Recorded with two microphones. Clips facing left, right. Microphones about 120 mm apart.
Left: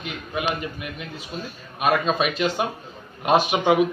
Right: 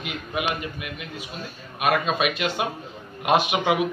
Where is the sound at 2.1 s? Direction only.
35° left (ahead or behind).